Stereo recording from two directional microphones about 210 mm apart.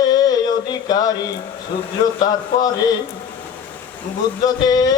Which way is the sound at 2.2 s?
20° left (ahead or behind).